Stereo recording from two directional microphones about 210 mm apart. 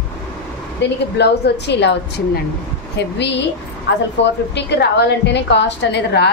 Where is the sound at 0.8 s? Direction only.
55° left (ahead or behind).